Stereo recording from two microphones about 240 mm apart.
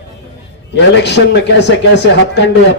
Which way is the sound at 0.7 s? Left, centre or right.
Left.